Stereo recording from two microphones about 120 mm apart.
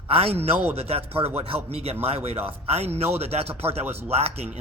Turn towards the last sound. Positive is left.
turn(degrees=-60)  # may be behind; listen again after turning